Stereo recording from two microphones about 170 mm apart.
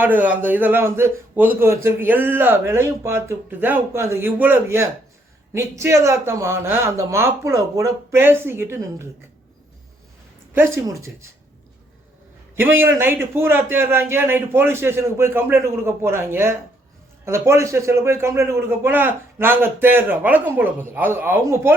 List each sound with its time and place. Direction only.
0.0 s a man's voice: 10° right (ahead or behind)
10.5 s a man's voice: 15° right (ahead or behind)
12.5 s a man's voice: 10° right (ahead or behind)